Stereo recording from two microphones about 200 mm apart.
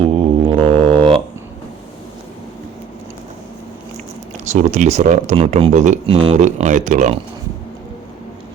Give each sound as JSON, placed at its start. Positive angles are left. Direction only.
{"t": 0.0, "sound": "mantra", "side_deg": -25}
{"t": 4.4, "sound": "speech", "side_deg": -35}